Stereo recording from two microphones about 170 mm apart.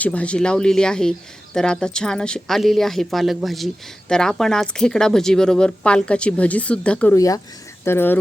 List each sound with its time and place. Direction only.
0.0 s speech: 10° left (ahead or behind)
7.2 s speech: 20° left (ahead or behind)